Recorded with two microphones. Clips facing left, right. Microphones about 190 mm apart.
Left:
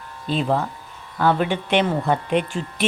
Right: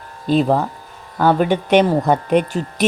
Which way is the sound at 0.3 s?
40° right (ahead or behind).